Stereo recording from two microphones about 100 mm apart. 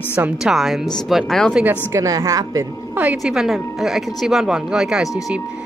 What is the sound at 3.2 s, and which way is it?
Speech, 5° right (ahead or behind).